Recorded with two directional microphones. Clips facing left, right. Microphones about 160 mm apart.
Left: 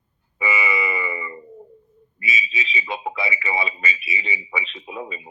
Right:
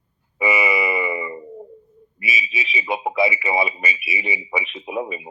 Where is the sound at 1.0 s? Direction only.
20° right (ahead or behind).